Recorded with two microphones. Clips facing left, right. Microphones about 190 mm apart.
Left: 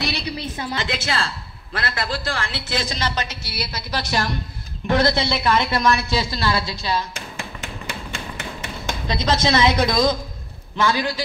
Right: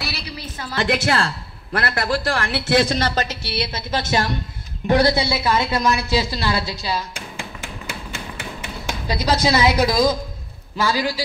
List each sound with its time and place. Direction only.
0.7 s a woman's voice: 60° right (ahead or behind)
3.4 s a woman's voice: 25° right (ahead or behind); by 5.9 s 10° right (ahead or behind)
6.0 s a sound: 10° right (ahead or behind)
10.8 s a man's voice: 10° right (ahead or behind)